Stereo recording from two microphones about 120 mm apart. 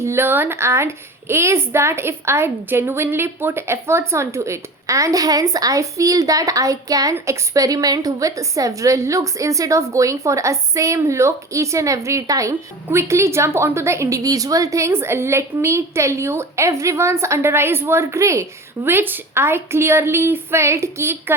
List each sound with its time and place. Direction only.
0.0 s a woman's voice: 20° right (ahead or behind)